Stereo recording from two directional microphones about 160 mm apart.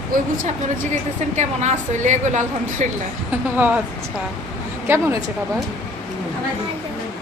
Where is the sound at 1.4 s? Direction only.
50° right (ahead or behind).